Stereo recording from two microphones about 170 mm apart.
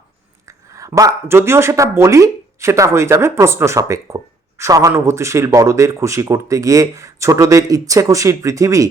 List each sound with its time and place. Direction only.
0.4 s speech: 20° right (ahead or behind)